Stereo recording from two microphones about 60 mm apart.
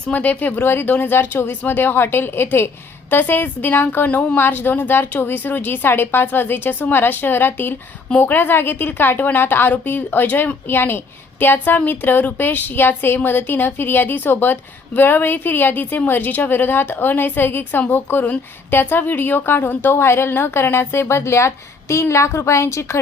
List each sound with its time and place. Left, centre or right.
0.1 s a woman's voice: left
4.4 s a woman's voice: left